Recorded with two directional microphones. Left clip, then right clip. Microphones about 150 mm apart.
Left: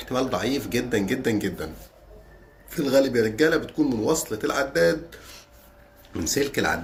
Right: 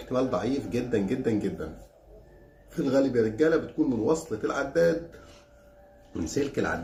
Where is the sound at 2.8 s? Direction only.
10° left (ahead or behind).